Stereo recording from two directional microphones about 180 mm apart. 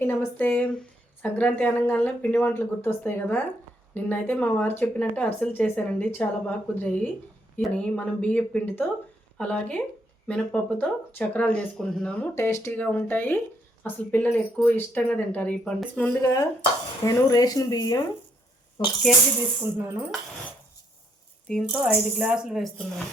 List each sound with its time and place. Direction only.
0.0 s speech: 10° left (ahead or behind)
19.7 s speech: 10° right (ahead or behind)
21.4 s a woman's voice: 5° left (ahead or behind)
21.7 s speech: 10° right (ahead or behind)